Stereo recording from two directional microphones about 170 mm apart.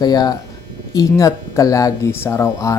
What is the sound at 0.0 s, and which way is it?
Speech, 25° left (ahead or behind).